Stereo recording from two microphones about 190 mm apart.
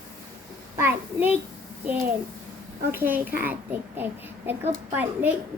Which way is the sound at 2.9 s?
10° right (ahead or behind).